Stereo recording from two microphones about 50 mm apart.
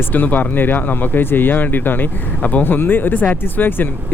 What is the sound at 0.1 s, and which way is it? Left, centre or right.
Speech, left.